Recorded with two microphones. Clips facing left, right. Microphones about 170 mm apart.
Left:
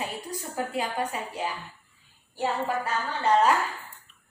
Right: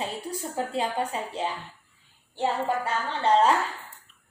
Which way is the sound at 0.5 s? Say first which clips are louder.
Right 1 dB; 30° right (ahead or behind).